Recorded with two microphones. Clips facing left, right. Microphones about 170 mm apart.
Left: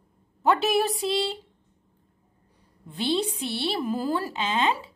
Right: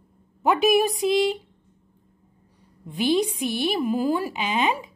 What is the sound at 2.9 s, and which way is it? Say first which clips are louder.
A woman's voice: right 4 dB; 15° right (ahead or behind).